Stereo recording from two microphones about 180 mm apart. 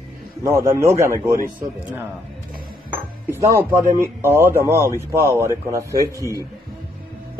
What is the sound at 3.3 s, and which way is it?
Speech, 10° right (ahead or behind).